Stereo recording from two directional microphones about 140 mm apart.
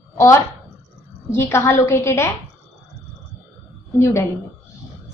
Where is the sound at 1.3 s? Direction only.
20° left (ahead or behind).